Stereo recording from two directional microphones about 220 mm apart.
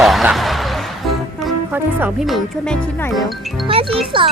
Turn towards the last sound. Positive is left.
turn(degrees=-25)  # may be behind; listen again after turning